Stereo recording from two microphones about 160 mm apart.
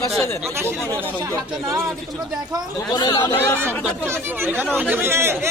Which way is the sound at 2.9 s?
25° left (ahead or behind).